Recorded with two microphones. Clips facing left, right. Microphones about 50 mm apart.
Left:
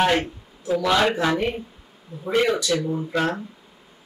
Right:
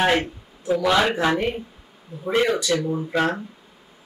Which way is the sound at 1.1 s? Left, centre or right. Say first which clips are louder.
Right 1 dB; right.